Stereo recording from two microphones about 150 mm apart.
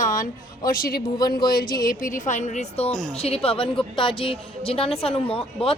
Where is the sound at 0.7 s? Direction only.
75° left (ahead or behind).